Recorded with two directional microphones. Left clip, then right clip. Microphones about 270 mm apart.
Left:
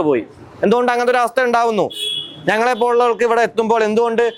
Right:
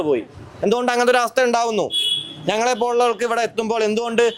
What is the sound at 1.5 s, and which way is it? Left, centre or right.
Speech, left.